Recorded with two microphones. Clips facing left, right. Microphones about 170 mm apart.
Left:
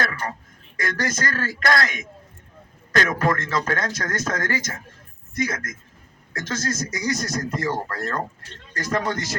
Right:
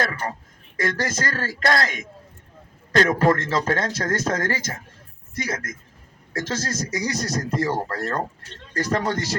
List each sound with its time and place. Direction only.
0.0 s speech: 30° right (ahead or behind)